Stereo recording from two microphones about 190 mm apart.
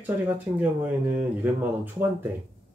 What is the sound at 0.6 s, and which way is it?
Speech, 10° right (ahead or behind).